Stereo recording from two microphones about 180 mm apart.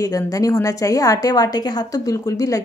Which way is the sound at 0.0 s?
20° left (ahead or behind).